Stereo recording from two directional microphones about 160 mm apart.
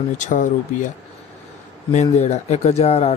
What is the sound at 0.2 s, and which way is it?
Speech, 50° left (ahead or behind).